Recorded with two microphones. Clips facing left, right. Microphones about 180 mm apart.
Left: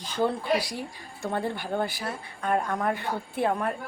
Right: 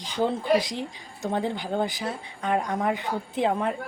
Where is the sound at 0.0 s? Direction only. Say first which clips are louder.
Right 1 dB; 15° right (ahead or behind).